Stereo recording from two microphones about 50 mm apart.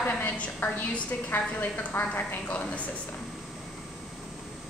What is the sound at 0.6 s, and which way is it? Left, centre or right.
A woman's voice, left.